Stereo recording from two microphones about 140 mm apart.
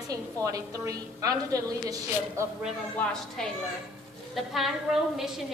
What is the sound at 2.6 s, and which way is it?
A woman's voice, 5° left (ahead or behind).